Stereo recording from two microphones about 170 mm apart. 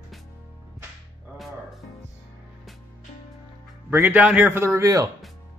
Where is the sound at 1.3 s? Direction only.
Centre (ahead or behind).